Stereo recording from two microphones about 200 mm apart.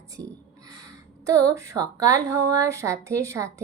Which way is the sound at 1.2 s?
15° right (ahead or behind).